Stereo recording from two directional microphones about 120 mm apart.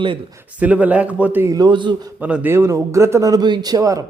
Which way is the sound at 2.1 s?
15° right (ahead or behind).